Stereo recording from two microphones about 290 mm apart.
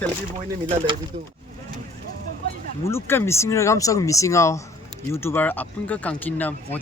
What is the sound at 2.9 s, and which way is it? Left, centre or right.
Speech, centre.